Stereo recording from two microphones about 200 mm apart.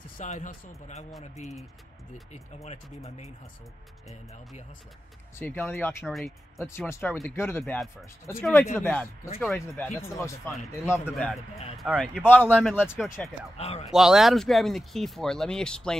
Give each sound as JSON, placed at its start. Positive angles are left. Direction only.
{"t": 0.2, "sound": "speech", "side_deg": 40}
{"t": 5.4, "sound": "speech", "side_deg": 10}
{"t": 6.0, "sound": "speech", "side_deg": 0}
{"t": 6.6, "sound": "speech", "side_deg": 10}
{"t": 12.3, "sound": "speech", "side_deg": 10}
{"t": 12.8, "sound": "speech", "side_deg": -5}
{"t": 13.6, "sound": "speech", "side_deg": 30}
{"t": 13.9, "sound": "speech", "side_deg": 0}